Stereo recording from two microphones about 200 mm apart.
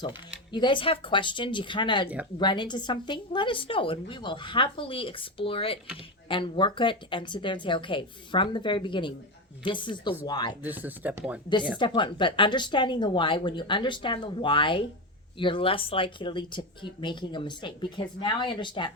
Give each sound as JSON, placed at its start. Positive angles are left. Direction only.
{"t": 0.5, "sound": "speech", "side_deg": 25}
{"t": 10.6, "sound": "speech", "side_deg": -10}
{"t": 11.8, "sound": "speech", "side_deg": 25}